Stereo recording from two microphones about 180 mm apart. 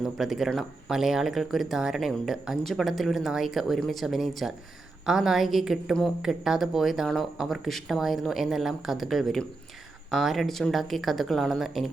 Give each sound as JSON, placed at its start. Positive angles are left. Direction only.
{"t": 0.0, "sound": "speech", "side_deg": 0}